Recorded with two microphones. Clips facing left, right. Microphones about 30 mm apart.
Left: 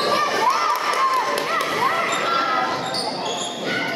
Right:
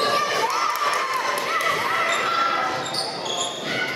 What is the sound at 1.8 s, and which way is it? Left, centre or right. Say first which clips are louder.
Basketball bounce: left 2 dB; centre.